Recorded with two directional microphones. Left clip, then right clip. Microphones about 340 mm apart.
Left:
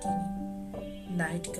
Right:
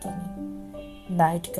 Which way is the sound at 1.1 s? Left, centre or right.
Centre.